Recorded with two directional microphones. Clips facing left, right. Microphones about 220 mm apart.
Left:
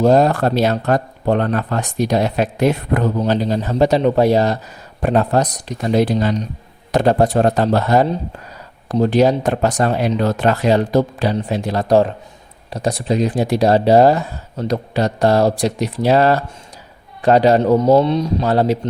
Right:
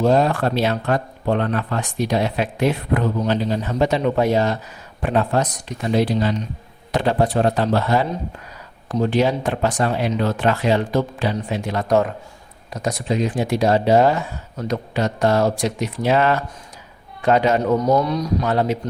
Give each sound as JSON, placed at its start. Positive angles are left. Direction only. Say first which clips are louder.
{"t": 0.0, "sound": "speech", "louder": "left 4 dB", "side_deg": 40}